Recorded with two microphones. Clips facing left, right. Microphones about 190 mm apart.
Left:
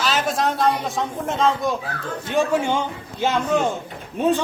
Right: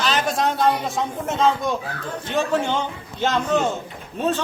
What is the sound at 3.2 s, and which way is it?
Speech, 10° left (ahead or behind).